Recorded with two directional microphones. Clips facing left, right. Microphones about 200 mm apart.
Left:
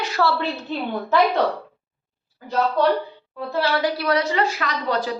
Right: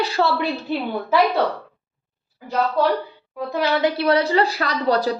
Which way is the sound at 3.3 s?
15° right (ahead or behind).